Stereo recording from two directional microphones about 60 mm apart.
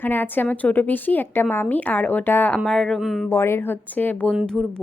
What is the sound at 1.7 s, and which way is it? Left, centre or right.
Speech, left.